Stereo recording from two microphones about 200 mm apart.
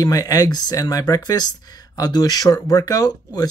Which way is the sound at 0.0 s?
20° left (ahead or behind).